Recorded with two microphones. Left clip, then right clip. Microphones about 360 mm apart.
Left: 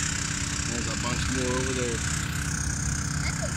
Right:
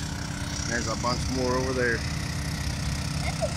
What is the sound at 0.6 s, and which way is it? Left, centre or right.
Speech, centre.